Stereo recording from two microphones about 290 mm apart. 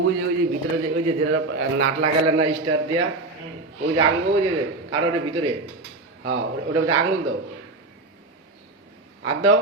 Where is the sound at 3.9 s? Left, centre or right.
Right.